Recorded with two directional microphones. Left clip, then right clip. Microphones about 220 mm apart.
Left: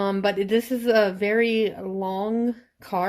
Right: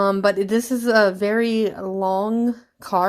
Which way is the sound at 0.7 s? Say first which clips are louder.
Right 5 dB; 20° right (ahead or behind).